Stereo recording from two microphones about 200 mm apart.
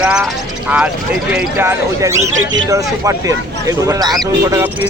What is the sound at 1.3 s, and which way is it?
Speech, 10° right (ahead or behind).